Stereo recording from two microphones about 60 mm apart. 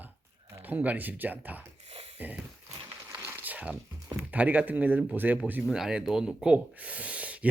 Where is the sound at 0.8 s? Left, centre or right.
Right.